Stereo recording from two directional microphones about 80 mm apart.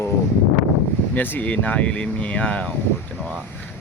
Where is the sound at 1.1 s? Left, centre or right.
Left.